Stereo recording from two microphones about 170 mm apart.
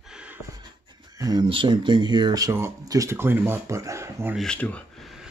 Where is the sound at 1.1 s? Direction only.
25° right (ahead or behind).